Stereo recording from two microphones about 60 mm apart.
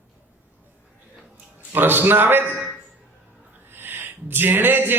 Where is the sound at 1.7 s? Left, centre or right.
Right.